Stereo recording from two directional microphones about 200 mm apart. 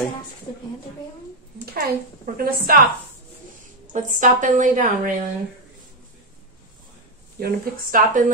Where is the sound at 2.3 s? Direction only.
45° right (ahead or behind).